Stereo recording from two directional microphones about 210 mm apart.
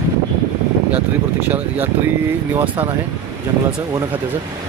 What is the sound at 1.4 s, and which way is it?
Speech, 10° right (ahead or behind).